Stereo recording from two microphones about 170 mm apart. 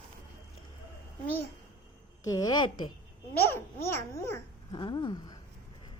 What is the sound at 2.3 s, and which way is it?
Speech, 20° left (ahead or behind).